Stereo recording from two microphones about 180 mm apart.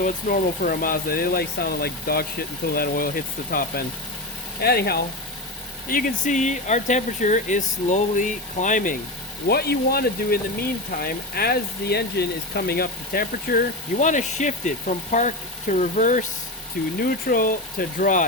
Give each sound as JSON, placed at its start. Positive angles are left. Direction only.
{"t": 0.0, "sound": "speech", "side_deg": 50}
{"t": 9.5, "sound": "speech", "side_deg": 60}
{"t": 17.0, "sound": "speech", "side_deg": 55}